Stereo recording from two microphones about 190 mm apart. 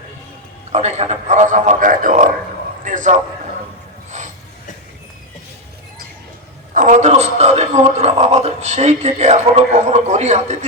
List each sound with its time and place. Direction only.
0.7 s a man's voice: 35° right (ahead or behind)
2.8 s a sound: 40° right (ahead or behind)
6.7 s a man's voice: 40° right (ahead or behind)